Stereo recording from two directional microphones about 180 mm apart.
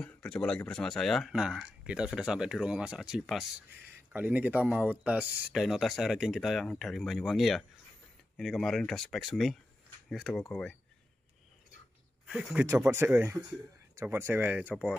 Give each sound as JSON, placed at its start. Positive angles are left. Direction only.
{"t": 0.0, "sound": "speech", "side_deg": 5}
{"t": 12.3, "sound": "speech", "side_deg": -5}
{"t": 12.6, "sound": "speech", "side_deg": -15}